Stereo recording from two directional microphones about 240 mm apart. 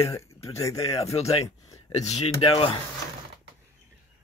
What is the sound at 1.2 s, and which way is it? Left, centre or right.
Speech, left.